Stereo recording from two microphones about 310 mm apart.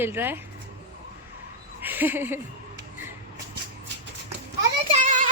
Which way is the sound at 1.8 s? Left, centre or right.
Centre.